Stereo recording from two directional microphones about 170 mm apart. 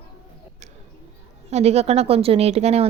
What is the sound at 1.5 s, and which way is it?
A woman's voice, 40° right (ahead or behind).